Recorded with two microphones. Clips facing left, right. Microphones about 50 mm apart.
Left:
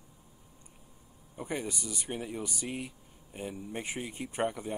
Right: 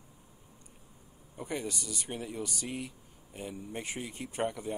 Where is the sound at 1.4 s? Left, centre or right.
Centre.